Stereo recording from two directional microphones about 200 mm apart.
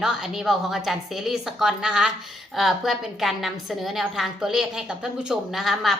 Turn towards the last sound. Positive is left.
turn(degrees=0)  # may be behind; listen again after turning